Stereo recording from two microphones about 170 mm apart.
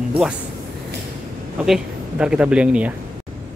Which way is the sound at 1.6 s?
5° right (ahead or behind).